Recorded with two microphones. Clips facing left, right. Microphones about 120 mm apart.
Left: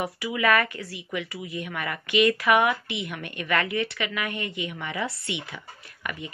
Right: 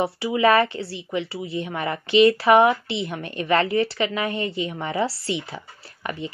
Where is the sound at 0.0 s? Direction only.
30° right (ahead or behind).